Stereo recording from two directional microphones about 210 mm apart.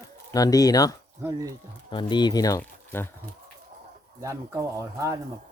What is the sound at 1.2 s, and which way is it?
Speech, 10° right (ahead or behind).